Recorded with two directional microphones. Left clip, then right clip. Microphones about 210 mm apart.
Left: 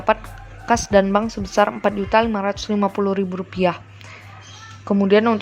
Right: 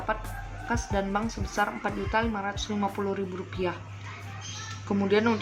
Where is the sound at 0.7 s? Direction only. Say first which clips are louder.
Left 13 dB; 50° left (ahead or behind).